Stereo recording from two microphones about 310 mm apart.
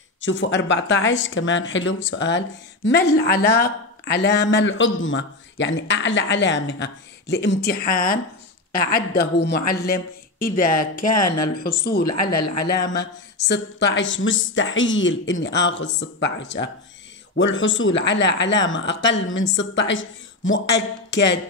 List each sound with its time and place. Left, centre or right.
0.2 s speech: left
11.1 s speech: left
11.5 s speech: left